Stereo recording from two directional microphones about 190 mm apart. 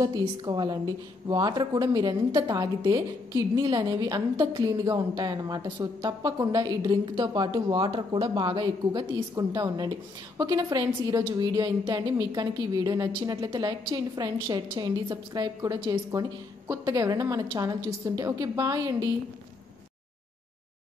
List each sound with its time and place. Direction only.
0.0 s a woman's voice: 20° right (ahead or behind)